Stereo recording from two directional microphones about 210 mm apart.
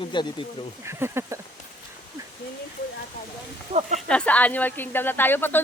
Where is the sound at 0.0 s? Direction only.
25° left (ahead or behind).